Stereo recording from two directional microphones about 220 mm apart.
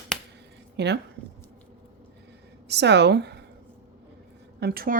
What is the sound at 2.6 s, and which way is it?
Speech, 50° right (ahead or behind).